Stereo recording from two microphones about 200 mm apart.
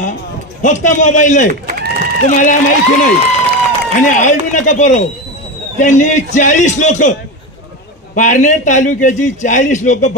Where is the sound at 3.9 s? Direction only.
40° left (ahead or behind).